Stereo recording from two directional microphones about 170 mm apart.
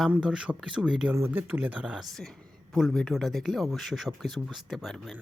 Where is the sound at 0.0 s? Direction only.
5° right (ahead or behind).